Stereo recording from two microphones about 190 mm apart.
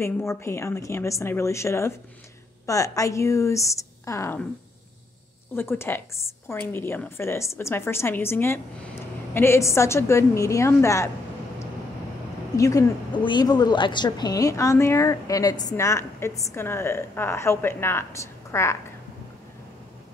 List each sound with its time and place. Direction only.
0.0 s speech: 15° left (ahead or behind)
5.6 s speech: 10° left (ahead or behind)
12.5 s speech: 15° left (ahead or behind)